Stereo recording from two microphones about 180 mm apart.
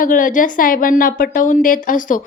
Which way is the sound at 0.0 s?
50° left (ahead or behind).